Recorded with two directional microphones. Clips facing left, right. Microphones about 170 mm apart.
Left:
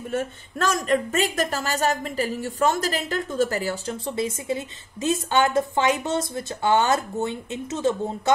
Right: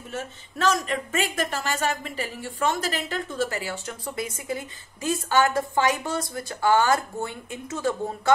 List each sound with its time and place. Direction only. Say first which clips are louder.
0.1 s speech: left 6 dB; 50° left (ahead or behind)
4.0 s a woman's voice: left 5 dB; 25° left (ahead or behind)